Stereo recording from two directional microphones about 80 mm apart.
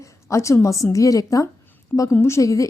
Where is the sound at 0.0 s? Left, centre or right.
Left.